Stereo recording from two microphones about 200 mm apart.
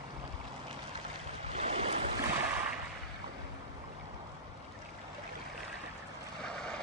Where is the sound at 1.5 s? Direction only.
30° right (ahead or behind).